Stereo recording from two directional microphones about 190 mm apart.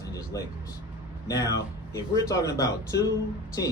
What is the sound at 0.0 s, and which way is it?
Vehicle, 20° left (ahead or behind).